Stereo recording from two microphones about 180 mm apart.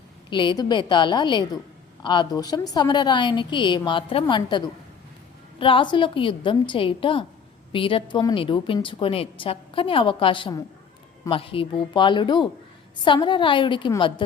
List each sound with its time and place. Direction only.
0.3 s a woman's voice: 25° left (ahead or behind)